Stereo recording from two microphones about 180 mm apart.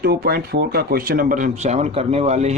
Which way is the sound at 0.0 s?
60° right (ahead or behind).